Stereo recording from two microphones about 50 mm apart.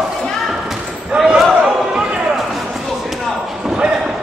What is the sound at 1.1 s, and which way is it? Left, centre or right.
Basketball bounce, centre.